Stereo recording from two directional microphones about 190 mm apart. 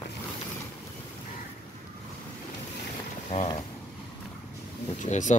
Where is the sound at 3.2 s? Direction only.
35° left (ahead or behind).